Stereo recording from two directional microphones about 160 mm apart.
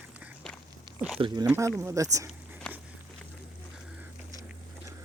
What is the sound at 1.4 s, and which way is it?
Speech, 15° right (ahead or behind).